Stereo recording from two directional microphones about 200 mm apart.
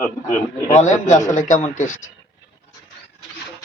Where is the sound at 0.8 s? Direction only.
35° left (ahead or behind).